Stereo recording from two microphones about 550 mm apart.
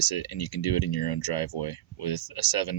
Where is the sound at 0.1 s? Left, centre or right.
Left.